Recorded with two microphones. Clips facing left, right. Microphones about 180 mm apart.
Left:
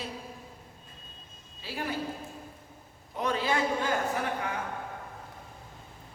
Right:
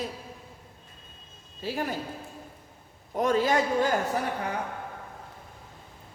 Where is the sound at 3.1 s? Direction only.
45° right (ahead or behind).